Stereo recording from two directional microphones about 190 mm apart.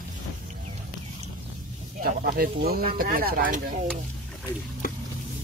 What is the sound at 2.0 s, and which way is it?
Speech, 50° right (ahead or behind).